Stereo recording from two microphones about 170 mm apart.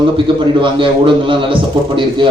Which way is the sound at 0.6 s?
30° right (ahead or behind).